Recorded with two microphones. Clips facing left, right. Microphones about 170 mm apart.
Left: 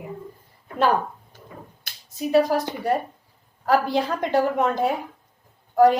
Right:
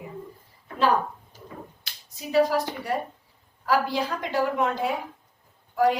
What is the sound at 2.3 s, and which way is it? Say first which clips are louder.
A woman's voice: left 2 dB; 45° left (ahead or behind).